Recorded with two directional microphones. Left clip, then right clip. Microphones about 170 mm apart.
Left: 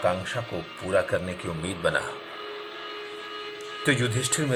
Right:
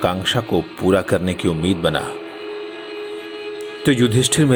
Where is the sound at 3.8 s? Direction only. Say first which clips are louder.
Right 8 dB; 25° right (ahead or behind).